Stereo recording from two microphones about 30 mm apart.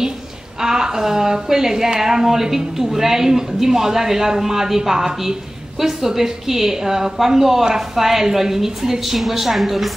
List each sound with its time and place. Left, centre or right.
0.6 s a woman's voice: right; by 9.8 s centre